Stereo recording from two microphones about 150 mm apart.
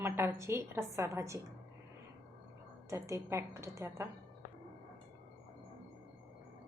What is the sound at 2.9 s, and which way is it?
A woman's voice, 20° right (ahead or behind).